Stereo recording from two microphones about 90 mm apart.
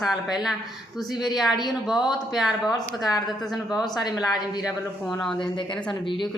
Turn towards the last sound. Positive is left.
turn(degrees=5)  # may be behind; listen again after turning